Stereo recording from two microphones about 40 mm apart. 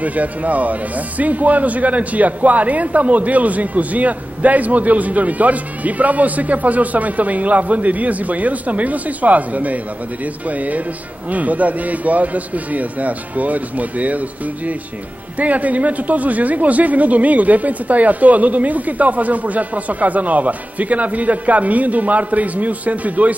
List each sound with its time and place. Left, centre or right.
0.0 s speech: right
15.3 s speech: right